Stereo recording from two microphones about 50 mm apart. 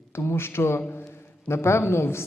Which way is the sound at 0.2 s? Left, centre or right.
Left.